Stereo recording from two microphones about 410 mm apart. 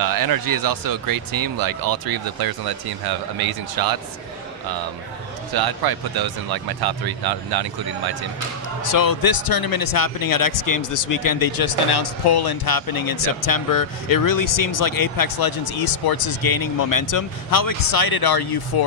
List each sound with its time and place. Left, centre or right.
0.0 s speech: right
5.5 s speech: right
8.9 s speech: left